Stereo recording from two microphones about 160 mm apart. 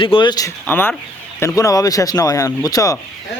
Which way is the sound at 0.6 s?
10° left (ahead or behind).